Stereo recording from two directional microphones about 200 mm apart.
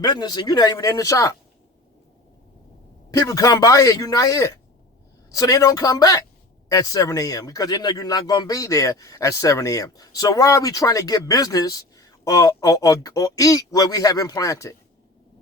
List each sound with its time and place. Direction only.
0.0 s speech: 20° left (ahead or behind)
3.1 s a man's voice: 15° left (ahead or behind)